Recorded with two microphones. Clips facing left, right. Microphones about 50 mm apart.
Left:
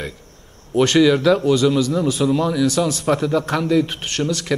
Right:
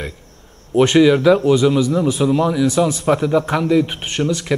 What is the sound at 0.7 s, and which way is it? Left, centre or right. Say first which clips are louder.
A man's voice: right 2 dB; centre.